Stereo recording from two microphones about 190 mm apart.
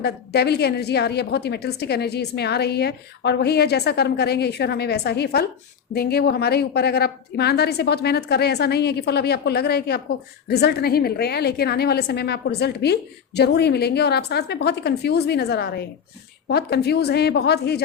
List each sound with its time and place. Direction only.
0.0 s a woman's voice: 60° left (ahead or behind)